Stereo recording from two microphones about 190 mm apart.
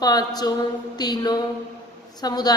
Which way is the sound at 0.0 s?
20° left (ahead or behind).